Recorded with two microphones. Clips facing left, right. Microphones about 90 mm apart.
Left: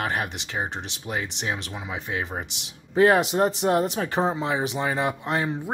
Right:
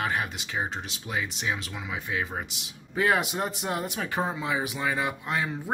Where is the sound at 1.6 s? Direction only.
25° left (ahead or behind).